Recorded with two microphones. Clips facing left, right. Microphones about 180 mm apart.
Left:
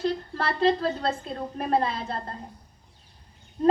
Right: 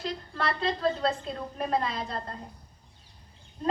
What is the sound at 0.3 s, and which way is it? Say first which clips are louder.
Speech: left 5 dB; 35° left (ahead or behind).